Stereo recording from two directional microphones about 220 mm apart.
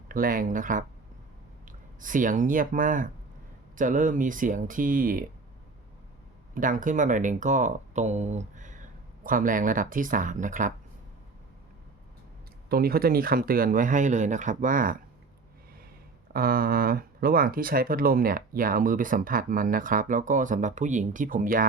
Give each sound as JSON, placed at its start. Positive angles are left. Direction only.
{"t": 0.1, "sound": "speech", "side_deg": -40}
{"t": 2.0, "sound": "speech", "side_deg": -35}
{"t": 6.5, "sound": "speech", "side_deg": -35}
{"t": 12.6, "sound": "speech", "side_deg": -45}
{"t": 16.3, "sound": "speech", "side_deg": -40}